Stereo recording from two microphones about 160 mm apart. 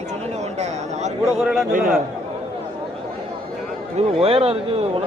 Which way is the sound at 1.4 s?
Centre (ahead or behind).